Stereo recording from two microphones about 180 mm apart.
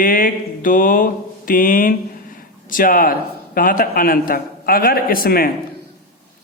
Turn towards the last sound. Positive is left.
turn(degrees=55)  # may be behind; listen again after turning